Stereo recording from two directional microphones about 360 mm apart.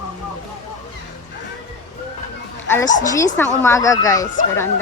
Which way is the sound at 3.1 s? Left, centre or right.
Centre.